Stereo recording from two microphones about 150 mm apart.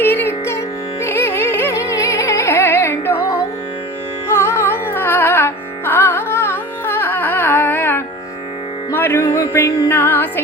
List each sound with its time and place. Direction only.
0.0 s music: 15° left (ahead or behind)
4.3 s carnatic music: 15° left (ahead or behind)
8.9 s music: 15° left (ahead or behind)